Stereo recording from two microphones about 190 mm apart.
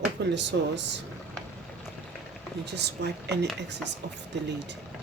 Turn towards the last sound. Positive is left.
turn(degrees=-65)  # may be behind; listen again after turning